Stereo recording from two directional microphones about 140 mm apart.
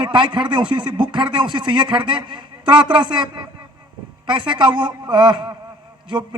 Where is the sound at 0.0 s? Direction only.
35° right (ahead or behind).